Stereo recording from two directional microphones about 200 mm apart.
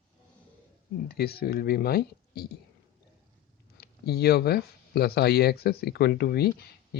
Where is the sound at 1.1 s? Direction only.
50° left (ahead or behind).